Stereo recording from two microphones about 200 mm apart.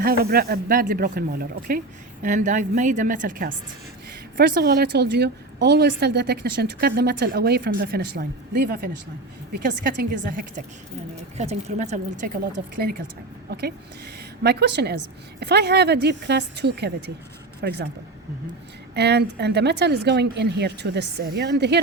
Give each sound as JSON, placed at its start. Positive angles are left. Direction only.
{"t": 0.0, "sound": "a woman's voice", "side_deg": -50}
{"t": 4.4, "sound": "a woman's voice", "side_deg": -55}
{"t": 11.3, "sound": "a woman's voice", "side_deg": -35}
{"t": 13.5, "sound": "a woman's voice", "side_deg": -50}
{"t": 18.9, "sound": "a woman's voice", "side_deg": -55}